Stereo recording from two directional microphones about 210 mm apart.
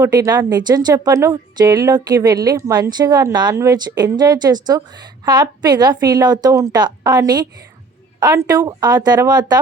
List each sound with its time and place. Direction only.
0.0 s a woman's voice: 15° right (ahead or behind)